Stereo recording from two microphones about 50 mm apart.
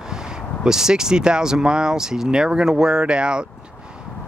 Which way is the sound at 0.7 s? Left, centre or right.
Centre.